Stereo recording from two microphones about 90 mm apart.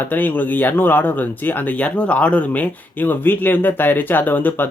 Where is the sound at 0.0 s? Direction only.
20° left (ahead or behind).